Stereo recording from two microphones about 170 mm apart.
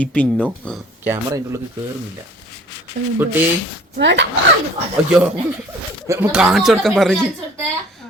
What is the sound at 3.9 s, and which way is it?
Speech, 90° right.